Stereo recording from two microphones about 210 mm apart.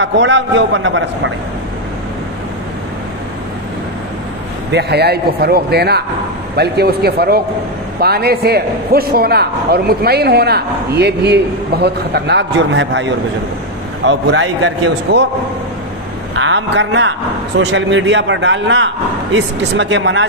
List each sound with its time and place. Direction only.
0.0 s a man's voice: 60° right (ahead or behind)
4.7 s a man's voice: 50° right (ahead or behind)
16.3 s a man's voice: 60° right (ahead or behind)